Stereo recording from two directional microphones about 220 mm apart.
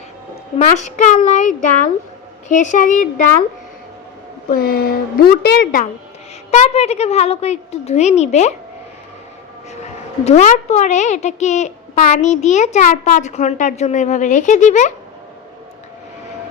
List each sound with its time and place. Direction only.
0.6 s a child's voice: 30° left (ahead or behind)
4.4 s a woman's voice: 40° left (ahead or behind)
6.5 s a woman's voice: 30° left (ahead or behind)
10.2 s a child's voice: 30° left (ahead or behind)